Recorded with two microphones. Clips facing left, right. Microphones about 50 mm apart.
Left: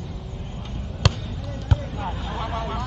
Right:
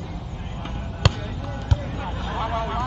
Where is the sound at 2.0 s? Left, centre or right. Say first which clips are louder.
Even; centre.